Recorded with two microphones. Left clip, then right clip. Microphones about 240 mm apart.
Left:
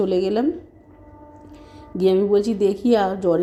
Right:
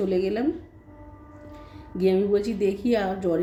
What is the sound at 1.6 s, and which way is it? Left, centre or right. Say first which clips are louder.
Speech: left 4 dB; left.